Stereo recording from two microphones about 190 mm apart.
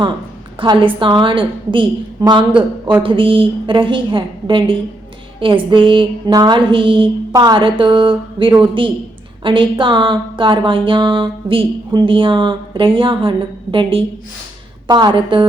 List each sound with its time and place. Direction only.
0.6 s speech: 25° right (ahead or behind)